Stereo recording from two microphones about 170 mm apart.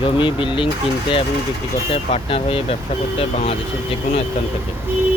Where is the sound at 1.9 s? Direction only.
35° left (ahead or behind).